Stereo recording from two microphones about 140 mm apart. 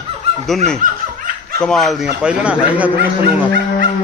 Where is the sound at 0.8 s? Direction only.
65° right (ahead or behind).